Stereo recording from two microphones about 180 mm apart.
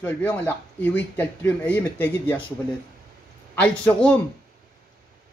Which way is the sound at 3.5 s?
5° left (ahead or behind).